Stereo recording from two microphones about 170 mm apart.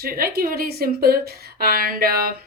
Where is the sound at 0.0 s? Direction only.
60° right (ahead or behind).